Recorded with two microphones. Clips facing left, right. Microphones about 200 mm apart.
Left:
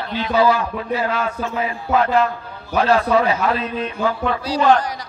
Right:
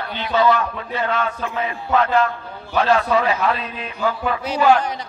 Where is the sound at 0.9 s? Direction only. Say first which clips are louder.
Left 1 dB; centre (ahead or behind).